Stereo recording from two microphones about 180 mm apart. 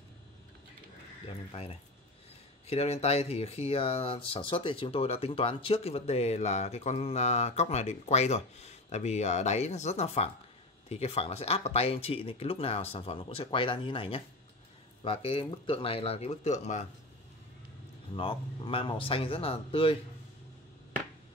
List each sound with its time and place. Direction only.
1.5 s speech: 35° left (ahead or behind)
18.1 s speech: 30° left (ahead or behind)